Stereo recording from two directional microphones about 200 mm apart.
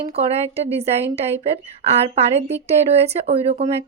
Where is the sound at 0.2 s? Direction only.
30° right (ahead or behind).